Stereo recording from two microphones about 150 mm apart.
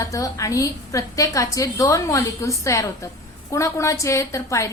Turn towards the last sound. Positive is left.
turn(degrees=20)  # may be behind; listen again after turning